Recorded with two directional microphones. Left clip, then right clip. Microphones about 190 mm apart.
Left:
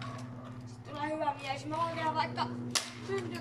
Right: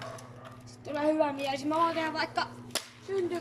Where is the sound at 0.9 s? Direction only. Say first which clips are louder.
Right 6 dB; 60° right (ahead or behind).